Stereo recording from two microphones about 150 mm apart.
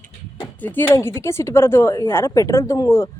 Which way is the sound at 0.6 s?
10° left (ahead or behind).